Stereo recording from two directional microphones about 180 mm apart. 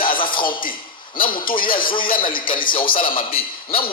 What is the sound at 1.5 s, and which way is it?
Speech, 50° left (ahead or behind).